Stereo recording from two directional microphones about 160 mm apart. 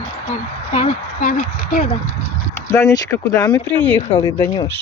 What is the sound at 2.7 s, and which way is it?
Speech, 15° left (ahead or behind).